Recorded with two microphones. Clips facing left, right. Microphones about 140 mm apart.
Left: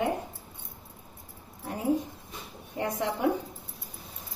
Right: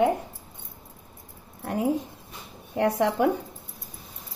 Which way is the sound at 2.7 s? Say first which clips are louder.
Right 8 dB; 70° right (ahead or behind).